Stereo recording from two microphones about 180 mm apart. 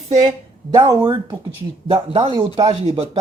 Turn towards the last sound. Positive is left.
turn(degrees=-35)  # may be behind; listen again after turning